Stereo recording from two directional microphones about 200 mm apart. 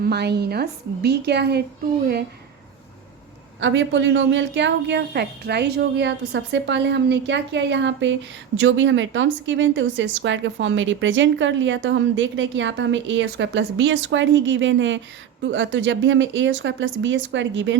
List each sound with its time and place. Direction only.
0.0 s a woman's voice: 55° right (ahead or behind)
3.6 s a woman's voice: 65° right (ahead or behind)